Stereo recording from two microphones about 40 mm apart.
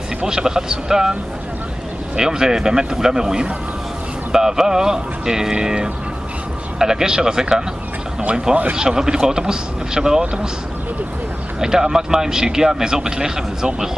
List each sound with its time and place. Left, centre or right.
0.2 s a man's voice: centre
2.1 s a man's voice: centre
8.7 s a man's voice: centre
11.6 s a man's voice: centre